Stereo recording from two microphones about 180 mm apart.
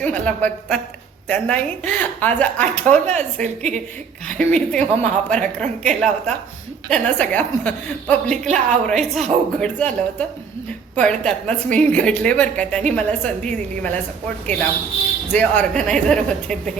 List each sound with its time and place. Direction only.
0.0 s a woman's voice: 10° left (ahead or behind)
8.4 s a woman's voice: 40° right (ahead or behind)
8.9 s a woman's voice: centre (ahead or behind)
15.3 s a woman's voice: 10° left (ahead or behind)